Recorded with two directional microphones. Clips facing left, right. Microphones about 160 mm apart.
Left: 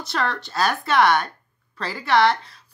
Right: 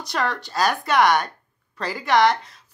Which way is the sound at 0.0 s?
15° right (ahead or behind).